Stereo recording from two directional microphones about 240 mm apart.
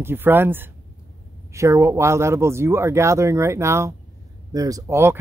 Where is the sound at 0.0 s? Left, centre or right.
Centre.